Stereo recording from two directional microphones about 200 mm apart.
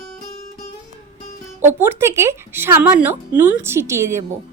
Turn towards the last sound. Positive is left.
turn(degrees=-15)  # may be behind; listen again after turning